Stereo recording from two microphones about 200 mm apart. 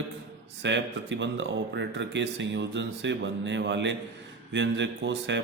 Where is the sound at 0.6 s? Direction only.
60° right (ahead or behind).